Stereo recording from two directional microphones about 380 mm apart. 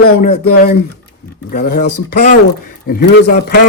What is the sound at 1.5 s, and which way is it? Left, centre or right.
A man's voice, left.